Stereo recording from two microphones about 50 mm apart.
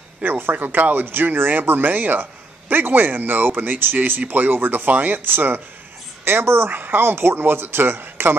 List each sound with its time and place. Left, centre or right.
0.2 s speech: right
6.2 s speech: right